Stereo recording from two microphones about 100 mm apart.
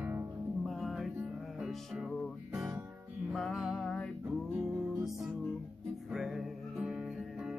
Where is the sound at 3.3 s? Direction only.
Centre (ahead or behind).